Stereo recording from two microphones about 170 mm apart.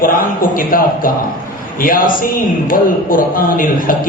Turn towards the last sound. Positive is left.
turn(degrees=55)  # may be behind; listen again after turning